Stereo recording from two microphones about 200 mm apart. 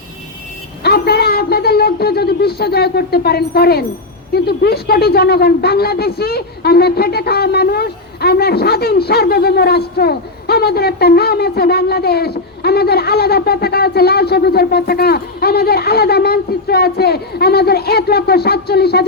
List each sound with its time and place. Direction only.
0.8 s speech: 50° left (ahead or behind)